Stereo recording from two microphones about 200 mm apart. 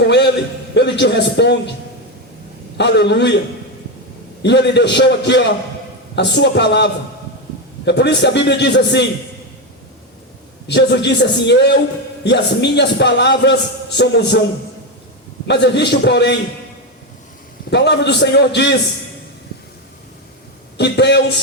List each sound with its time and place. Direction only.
0.0 s a sound: 60° left (ahead or behind)
0.7 s a man's voice: 60° left (ahead or behind)
2.7 s a man's voice: 60° left (ahead or behind)
4.4 s a man's voice: 60° left (ahead or behind)
10.7 s a man's voice: 60° left (ahead or behind)
15.4 s a man's voice: 60° left (ahead or behind)
17.7 s a man's voice: 55° left (ahead or behind)
20.7 s a man's voice: 60° left (ahead or behind)